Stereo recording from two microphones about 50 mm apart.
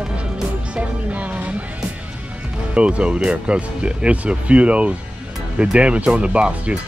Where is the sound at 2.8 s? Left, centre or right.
Right.